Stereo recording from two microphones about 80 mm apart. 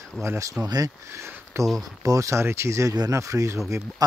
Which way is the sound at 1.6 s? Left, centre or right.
Right.